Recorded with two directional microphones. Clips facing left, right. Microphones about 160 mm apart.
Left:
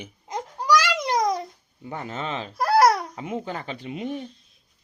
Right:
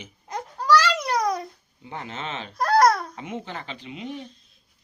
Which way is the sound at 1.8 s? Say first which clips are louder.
Left 3 dB; 45° left (ahead or behind).